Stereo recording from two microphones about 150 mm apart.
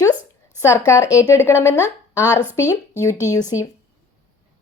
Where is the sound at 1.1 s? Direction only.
20° left (ahead or behind).